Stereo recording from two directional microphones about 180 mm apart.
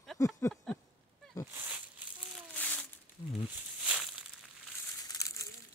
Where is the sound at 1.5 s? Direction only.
10° right (ahead or behind).